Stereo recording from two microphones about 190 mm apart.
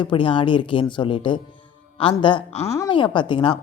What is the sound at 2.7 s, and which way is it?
Speech, 20° left (ahead or behind).